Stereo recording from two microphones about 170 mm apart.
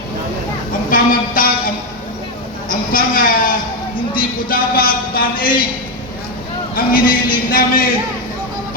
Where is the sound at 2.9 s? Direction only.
55° left (ahead or behind).